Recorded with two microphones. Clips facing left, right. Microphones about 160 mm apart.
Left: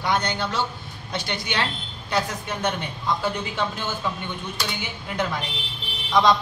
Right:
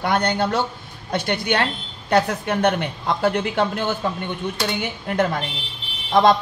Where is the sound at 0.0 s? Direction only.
60° right (ahead or behind).